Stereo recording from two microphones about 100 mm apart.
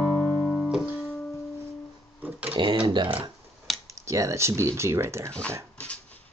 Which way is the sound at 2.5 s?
55° right (ahead or behind).